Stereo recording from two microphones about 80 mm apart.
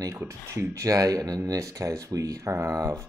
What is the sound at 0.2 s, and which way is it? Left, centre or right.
Speech, right.